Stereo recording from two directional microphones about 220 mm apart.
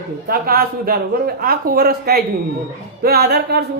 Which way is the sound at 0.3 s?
40° right (ahead or behind).